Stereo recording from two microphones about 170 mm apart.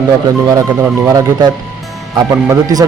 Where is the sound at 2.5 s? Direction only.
20° right (ahead or behind).